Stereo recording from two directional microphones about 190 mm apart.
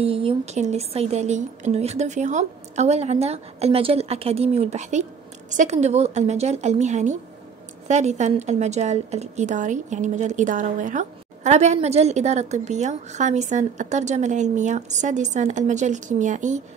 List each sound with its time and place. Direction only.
0.0 s a woman's voice: 30° right (ahead or behind)